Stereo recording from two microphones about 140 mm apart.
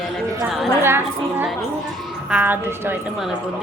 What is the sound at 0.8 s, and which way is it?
A woman's voice, 15° right (ahead or behind).